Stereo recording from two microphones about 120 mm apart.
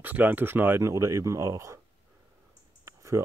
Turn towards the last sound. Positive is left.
turn(degrees=-25)  # may be behind; listen again after turning